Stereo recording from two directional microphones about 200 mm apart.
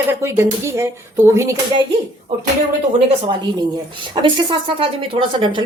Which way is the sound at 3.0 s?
25° right (ahead or behind).